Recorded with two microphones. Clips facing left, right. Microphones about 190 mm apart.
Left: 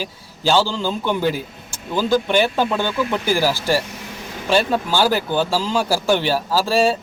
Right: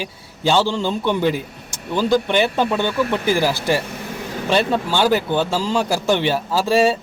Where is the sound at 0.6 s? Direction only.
25° right (ahead or behind).